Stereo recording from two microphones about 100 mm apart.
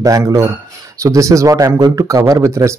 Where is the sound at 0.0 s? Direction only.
35° right (ahead or behind).